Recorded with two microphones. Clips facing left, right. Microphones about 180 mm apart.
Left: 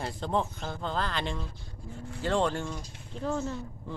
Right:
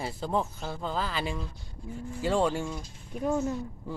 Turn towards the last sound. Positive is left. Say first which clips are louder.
# right 3 dB
turn(degrees=-10)  # may be behind; listen again after turning